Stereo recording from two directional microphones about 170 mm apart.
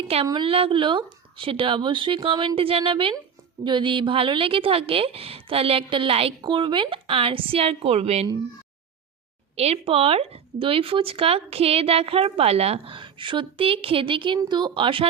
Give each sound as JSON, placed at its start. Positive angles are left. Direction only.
{"t": 0.3, "sound": "speech", "side_deg": -30}
{"t": 9.6, "sound": "speech", "side_deg": -35}